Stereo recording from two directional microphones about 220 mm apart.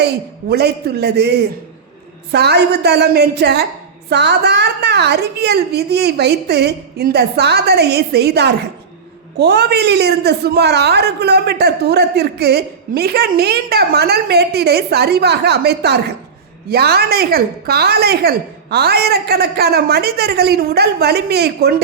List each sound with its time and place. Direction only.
0.0 s a man's voice: 45° right (ahead or behind)